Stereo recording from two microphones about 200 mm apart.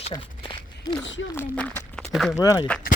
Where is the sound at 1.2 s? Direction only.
70° left (ahead or behind).